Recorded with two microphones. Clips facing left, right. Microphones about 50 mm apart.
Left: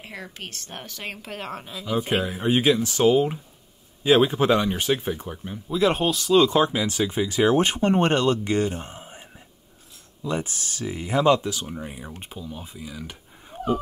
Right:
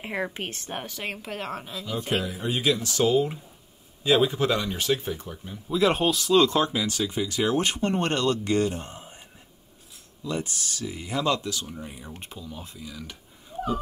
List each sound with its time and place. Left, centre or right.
0.0 s speech: right; by 2.0 s centre
2.2 s speech: left; by 5.4 s centre
5.7 s speech: centre
10.2 s speech: left